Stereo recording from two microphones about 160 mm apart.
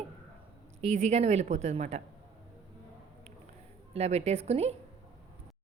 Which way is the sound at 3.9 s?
40° right (ahead or behind).